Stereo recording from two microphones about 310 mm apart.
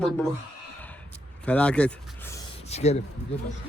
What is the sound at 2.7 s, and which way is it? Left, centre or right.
Speech, left.